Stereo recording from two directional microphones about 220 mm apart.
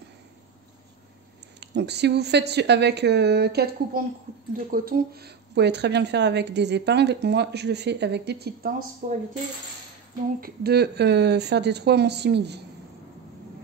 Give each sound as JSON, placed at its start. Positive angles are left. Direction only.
{"t": 1.6, "sound": "speech", "side_deg": -50}
{"t": 9.0, "sound": "coin", "side_deg": -35}
{"t": 10.4, "sound": "speech", "side_deg": -45}